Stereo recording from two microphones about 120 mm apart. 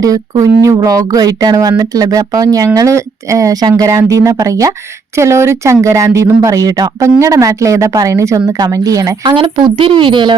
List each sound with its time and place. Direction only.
0.0 s speech: 30° right (ahead or behind)
9.3 s speech: 40° right (ahead or behind)